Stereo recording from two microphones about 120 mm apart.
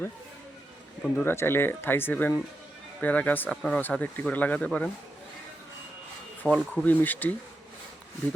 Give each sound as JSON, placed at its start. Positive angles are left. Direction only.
{"t": 1.0, "sound": "speech", "side_deg": 15}
{"t": 6.4, "sound": "speech", "side_deg": 10}